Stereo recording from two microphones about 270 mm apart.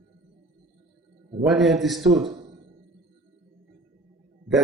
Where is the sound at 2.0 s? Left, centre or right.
Right.